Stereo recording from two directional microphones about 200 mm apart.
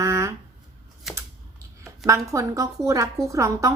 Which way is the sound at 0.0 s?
15° right (ahead or behind).